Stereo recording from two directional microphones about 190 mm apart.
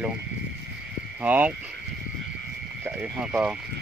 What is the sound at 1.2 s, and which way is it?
Speech, 10° right (ahead or behind).